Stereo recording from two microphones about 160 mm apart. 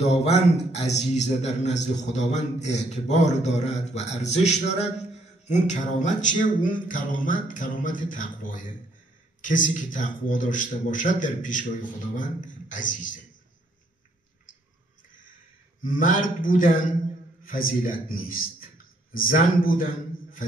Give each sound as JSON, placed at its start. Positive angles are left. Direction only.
{"t": 0.2, "sound": "a man's voice", "side_deg": 45}
{"t": 15.8, "sound": "a man's voice", "side_deg": 55}